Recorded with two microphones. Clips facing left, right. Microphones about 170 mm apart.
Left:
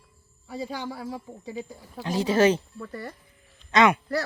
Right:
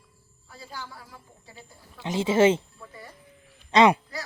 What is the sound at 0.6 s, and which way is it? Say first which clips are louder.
Speech: left 9 dB; 90° left.